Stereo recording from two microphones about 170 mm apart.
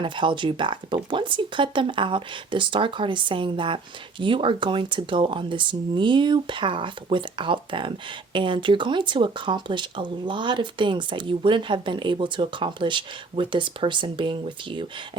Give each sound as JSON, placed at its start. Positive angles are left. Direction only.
{"t": 0.0, "sound": "speech", "side_deg": -30}